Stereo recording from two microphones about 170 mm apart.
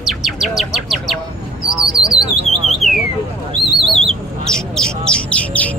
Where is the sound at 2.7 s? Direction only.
Centre (ahead or behind).